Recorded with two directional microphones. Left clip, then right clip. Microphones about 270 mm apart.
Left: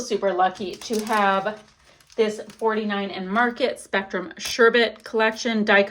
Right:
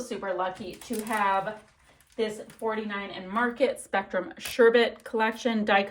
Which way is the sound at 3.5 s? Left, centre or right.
Centre.